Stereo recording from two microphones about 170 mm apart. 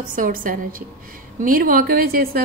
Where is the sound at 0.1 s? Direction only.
55° right (ahead or behind).